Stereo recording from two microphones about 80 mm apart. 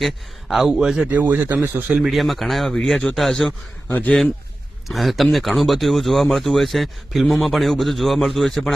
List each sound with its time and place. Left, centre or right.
0.0 s speech: centre
1.1 s speech: centre
2.0 s speech: centre
3.8 s speech: left
4.9 s speech: centre